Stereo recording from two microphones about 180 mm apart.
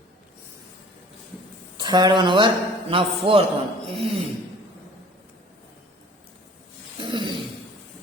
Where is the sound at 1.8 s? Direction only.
25° right (ahead or behind).